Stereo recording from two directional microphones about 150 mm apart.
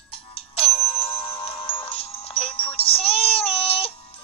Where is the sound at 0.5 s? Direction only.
40° left (ahead or behind).